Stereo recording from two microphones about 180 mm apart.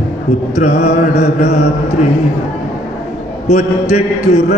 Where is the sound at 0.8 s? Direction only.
65° left (ahead or behind).